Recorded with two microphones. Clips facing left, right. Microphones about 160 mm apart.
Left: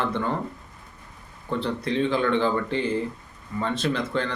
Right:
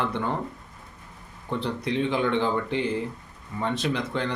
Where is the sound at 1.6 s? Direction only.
15° right (ahead or behind).